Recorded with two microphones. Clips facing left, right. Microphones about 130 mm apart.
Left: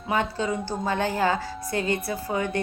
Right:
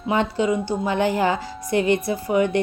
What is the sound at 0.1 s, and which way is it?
A woman's voice, 20° right (ahead or behind).